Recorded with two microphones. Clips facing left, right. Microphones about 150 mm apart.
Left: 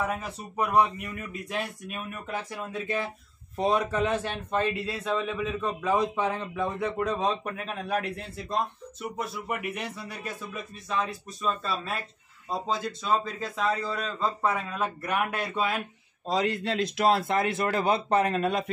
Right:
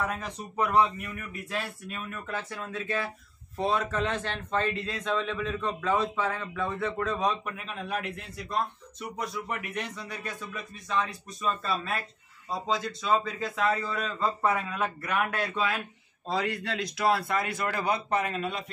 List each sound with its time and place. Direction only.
0.0 s a man's voice: 10° left (ahead or behind)
7.2 s speech: 30° left (ahead or behind)
7.5 s a man's voice: 40° left (ahead or behind)
9.0 s speech: 5° left (ahead or behind)
13.6 s speech: centre (ahead or behind)
15.3 s a man's voice: 15° left (ahead or behind); by 18.3 s 30° left (ahead or behind)
18.3 s speech: 45° left (ahead or behind)